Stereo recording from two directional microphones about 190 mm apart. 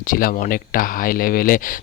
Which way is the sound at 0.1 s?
45° left (ahead or behind).